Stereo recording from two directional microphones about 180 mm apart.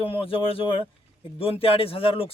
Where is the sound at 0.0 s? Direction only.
30° left (ahead or behind).